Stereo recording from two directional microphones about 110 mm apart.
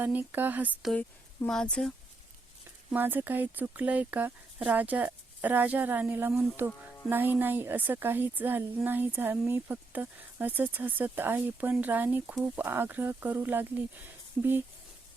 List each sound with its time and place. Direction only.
0.0 s speech: 15° right (ahead or behind)
1.5 s speech: 5° left (ahead or behind)
2.9 s speech: 15° right (ahead or behind)